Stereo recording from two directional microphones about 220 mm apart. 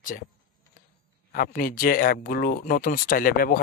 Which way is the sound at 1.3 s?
40° left (ahead or behind).